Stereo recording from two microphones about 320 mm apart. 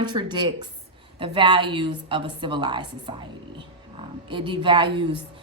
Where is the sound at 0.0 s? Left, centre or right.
Centre.